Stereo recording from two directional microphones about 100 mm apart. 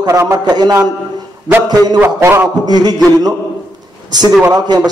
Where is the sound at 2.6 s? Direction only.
45° right (ahead or behind).